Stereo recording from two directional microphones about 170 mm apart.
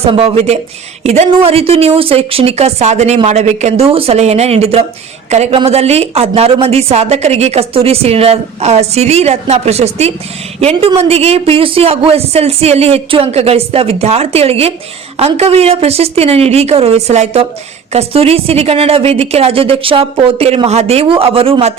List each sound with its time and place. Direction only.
0.0 s a woman's voice: 35° right (ahead or behind)